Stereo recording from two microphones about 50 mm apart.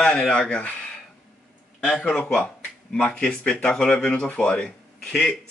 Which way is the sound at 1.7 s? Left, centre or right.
Left.